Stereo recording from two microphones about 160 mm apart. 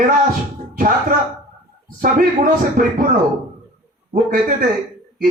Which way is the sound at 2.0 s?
60° right (ahead or behind).